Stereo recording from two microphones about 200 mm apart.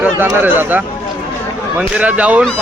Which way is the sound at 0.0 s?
10° right (ahead or behind).